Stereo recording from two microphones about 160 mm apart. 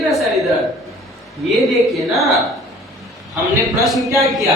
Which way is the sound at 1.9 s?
Centre (ahead or behind).